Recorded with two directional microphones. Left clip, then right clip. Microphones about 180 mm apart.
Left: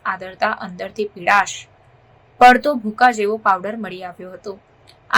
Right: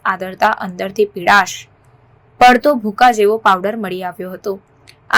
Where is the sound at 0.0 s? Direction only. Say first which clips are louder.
Right 6 dB; 20° right (ahead or behind).